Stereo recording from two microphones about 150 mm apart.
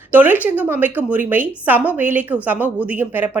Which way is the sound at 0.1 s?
10° right (ahead or behind).